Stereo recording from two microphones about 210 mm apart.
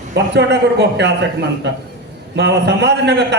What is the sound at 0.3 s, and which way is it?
Speech, 55° right (ahead or behind).